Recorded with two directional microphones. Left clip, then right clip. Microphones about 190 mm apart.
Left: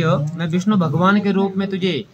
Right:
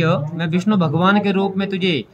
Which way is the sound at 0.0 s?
20° right (ahead or behind).